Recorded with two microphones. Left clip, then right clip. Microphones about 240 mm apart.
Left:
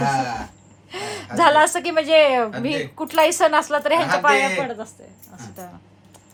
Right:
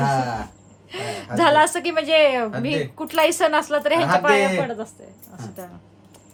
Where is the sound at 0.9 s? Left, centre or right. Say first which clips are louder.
Left 1 dB; centre.